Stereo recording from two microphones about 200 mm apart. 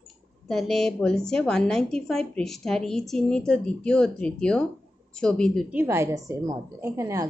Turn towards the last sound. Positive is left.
turn(degrees=-15)  # may be behind; listen again after turning